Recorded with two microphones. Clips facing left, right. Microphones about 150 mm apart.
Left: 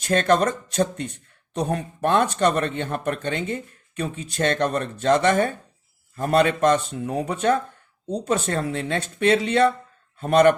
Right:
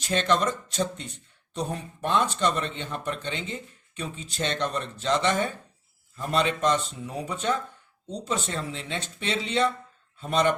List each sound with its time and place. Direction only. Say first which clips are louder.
0.0 s speech: left 5 dB; 50° left (ahead or behind)